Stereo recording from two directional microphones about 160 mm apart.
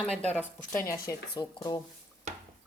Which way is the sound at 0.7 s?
20° left (ahead or behind).